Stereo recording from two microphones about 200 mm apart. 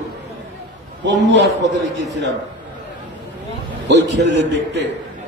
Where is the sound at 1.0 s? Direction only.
60° right (ahead or behind).